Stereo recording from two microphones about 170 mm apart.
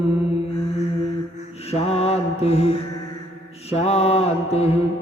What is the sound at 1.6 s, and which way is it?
Mantra, 35° left (ahead or behind).